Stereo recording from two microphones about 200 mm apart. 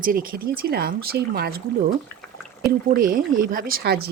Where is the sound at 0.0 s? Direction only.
45° right (ahead or behind).